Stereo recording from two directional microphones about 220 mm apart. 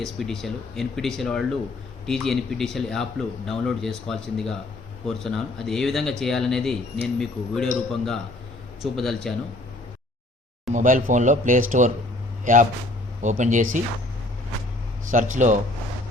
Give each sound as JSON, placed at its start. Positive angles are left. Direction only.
{"t": 0.0, "sound": "speech", "side_deg": 0}
{"t": 10.7, "sound": "speech", "side_deg": -35}
{"t": 13.2, "sound": "speech", "side_deg": -35}
{"t": 15.1, "sound": "speech", "side_deg": -35}